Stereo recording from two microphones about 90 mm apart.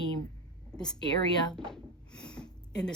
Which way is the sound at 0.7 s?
25° right (ahead or behind).